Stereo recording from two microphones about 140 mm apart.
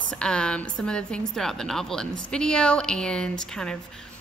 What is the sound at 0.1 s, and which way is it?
A woman's voice, 5° left (ahead or behind).